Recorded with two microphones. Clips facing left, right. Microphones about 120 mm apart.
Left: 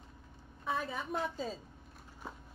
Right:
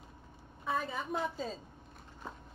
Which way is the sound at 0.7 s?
Centre (ahead or behind).